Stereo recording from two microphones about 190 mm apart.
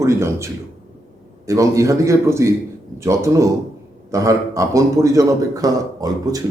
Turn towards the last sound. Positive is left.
turn(degrees=-20)  # may be behind; listen again after turning